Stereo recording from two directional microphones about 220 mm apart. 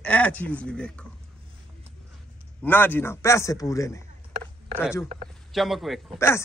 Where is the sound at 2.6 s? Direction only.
10° left (ahead or behind).